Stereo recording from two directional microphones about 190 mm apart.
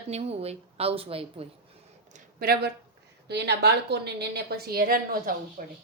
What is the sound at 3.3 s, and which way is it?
A woman's voice, 60° right (ahead or behind).